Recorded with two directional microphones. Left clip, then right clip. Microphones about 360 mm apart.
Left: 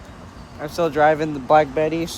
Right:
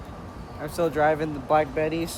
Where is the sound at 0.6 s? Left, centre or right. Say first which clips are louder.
Left 5 dB; centre.